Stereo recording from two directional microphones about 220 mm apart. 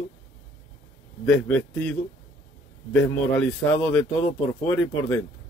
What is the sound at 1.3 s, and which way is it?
Speech, 5° left (ahead or behind).